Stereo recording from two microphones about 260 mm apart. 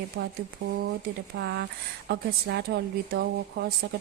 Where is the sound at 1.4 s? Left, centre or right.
Right.